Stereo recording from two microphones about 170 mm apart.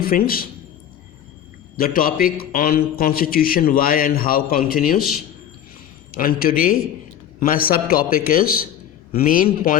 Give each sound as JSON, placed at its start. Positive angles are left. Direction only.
{"t": 0.0, "sound": "a man's voice", "side_deg": 60}
{"t": 1.7, "sound": "a man's voice", "side_deg": 60}
{"t": 6.1, "sound": "a man's voice", "side_deg": 60}